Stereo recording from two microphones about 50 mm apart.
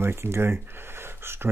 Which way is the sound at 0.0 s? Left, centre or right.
Right.